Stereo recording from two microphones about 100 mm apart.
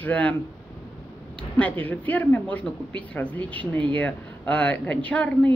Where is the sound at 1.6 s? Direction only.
15° left (ahead or behind).